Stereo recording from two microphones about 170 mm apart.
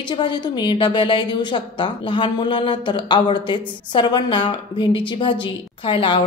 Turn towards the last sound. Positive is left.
turn(degrees=30)  # may be behind; listen again after turning